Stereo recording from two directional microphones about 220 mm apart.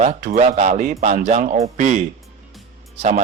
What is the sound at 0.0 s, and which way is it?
Speech, 35° right (ahead or behind).